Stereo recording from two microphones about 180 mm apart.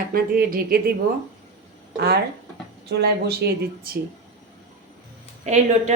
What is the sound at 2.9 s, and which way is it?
Speech, 65° right (ahead or behind).